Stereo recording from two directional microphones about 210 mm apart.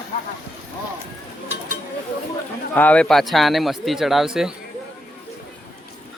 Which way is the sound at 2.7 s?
5° left (ahead or behind).